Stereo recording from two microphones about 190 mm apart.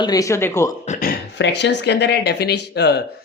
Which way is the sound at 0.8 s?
45° left (ahead or behind).